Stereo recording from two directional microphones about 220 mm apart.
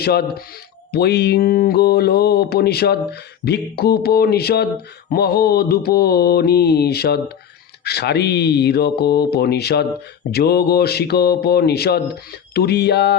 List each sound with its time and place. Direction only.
0.0 s speech: 45° left (ahead or behind)